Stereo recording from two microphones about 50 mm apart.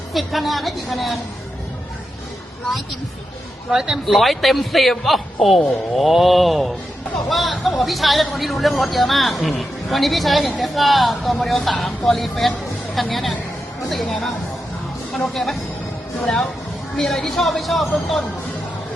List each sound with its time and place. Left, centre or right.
0.1 s speech: centre
3.7 s speech: centre
4.0 s speech: centre